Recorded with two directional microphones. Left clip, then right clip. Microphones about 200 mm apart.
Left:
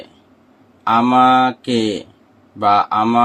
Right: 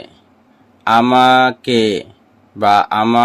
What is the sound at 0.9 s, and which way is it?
Speech, 35° right (ahead or behind).